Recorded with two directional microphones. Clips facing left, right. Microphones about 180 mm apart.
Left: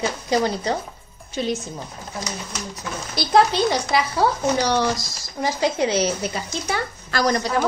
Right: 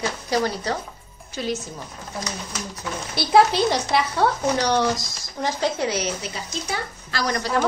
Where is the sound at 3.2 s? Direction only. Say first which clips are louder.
Even; 5° right (ahead or behind).